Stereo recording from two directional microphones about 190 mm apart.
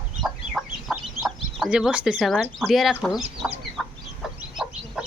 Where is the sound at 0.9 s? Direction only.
Centre (ahead or behind).